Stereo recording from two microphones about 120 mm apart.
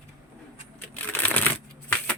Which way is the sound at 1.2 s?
15° left (ahead or behind).